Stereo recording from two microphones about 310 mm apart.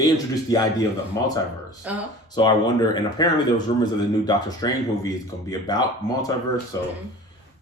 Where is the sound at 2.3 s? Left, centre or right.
Centre.